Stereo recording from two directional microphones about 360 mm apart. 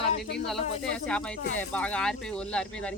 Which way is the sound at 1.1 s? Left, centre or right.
Centre.